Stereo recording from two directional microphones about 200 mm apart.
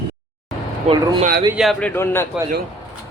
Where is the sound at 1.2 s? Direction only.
45° right (ahead or behind).